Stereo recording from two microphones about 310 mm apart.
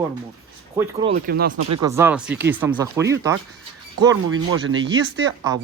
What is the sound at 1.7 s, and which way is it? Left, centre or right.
Speech, centre.